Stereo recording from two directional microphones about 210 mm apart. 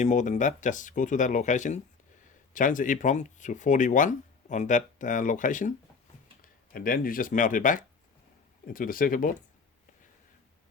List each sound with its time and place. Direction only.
0.0 s speech: 35° left (ahead or behind)